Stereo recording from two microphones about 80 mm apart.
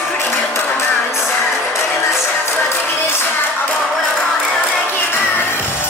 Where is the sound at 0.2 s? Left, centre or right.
Left.